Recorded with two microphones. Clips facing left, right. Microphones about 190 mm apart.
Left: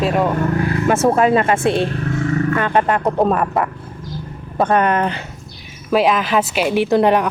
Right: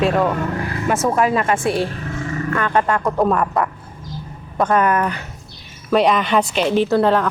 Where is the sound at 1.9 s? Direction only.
65° left (ahead or behind).